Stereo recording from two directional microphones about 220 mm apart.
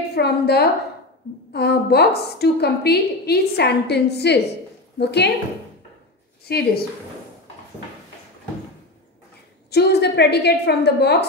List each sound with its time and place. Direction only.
0.1 s a woman's voice: 45° left (ahead or behind)
6.4 s a woman's voice: 45° left (ahead or behind)
9.7 s a woman's voice: 50° left (ahead or behind)